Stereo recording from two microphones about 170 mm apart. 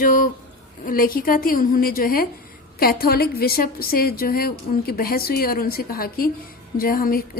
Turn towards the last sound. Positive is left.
turn(degrees=60)  # may be behind; listen again after turning